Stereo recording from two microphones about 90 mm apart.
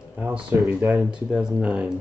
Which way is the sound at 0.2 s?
20° right (ahead or behind).